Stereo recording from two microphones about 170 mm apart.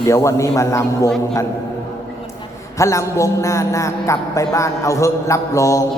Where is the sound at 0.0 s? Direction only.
15° left (ahead or behind).